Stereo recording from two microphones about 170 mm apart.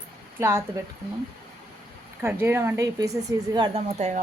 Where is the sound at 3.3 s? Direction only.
25° right (ahead or behind).